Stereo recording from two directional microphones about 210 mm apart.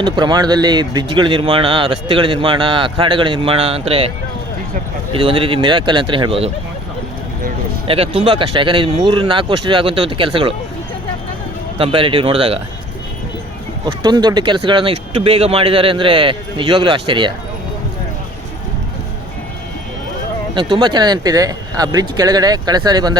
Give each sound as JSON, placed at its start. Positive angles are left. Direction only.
{"t": 0.0, "sound": "speech", "side_deg": -20}
{"t": 5.1, "sound": "speech", "side_deg": -25}
{"t": 7.9, "sound": "speech", "side_deg": -30}
{"t": 11.8, "sound": "speech", "side_deg": -25}
{"t": 13.8, "sound": "speech", "side_deg": -20}
{"t": 20.6, "sound": "speech", "side_deg": -25}